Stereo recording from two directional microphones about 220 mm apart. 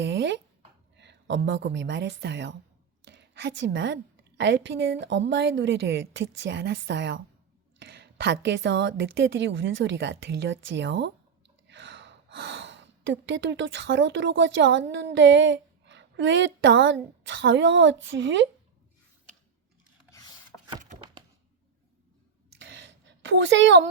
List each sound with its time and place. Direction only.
0.0 s a woman's voice: 50° right (ahead or behind)
20.1 s chopping: 15° left (ahead or behind)
22.5 s a sound: 55° right (ahead or behind)